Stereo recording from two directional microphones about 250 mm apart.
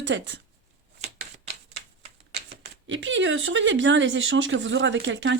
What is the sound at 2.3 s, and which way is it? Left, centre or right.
Speech, right.